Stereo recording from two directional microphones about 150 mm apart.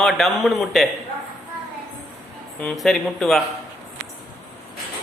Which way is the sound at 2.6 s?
Centre (ahead or behind).